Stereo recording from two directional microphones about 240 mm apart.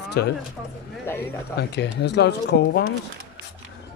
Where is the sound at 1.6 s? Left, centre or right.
Left.